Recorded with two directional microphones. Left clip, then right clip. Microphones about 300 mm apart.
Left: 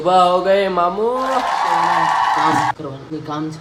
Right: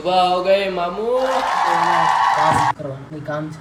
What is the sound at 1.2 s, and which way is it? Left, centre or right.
A man's voice, centre.